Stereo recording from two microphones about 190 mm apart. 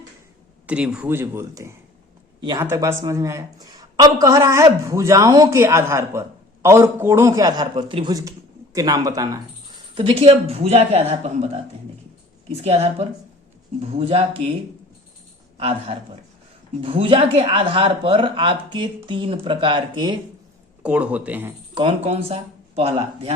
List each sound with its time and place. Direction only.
0.7 s a woman's voice: 5° right (ahead or behind); by 11.5 s 30° right (ahead or behind)
12.6 s speech: 35° right (ahead or behind)
14.1 s speech: 35° right (ahead or behind)
15.5 s a man's voice: 30° right (ahead or behind)
20.8 s a woman's voice: 5° right (ahead or behind)
21.8 s speech: 30° right (ahead or behind)